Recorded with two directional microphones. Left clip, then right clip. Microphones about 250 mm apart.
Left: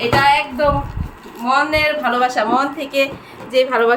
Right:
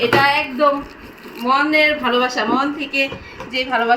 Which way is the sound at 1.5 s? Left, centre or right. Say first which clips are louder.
Right 1 dB; left.